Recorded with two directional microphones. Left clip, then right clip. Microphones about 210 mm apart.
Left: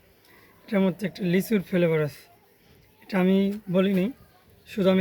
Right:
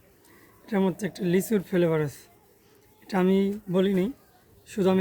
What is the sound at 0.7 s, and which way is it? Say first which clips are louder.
Speech: left 1 dB; 20° right (ahead or behind).